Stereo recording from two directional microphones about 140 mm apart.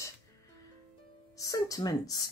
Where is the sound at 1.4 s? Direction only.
25° left (ahead or behind).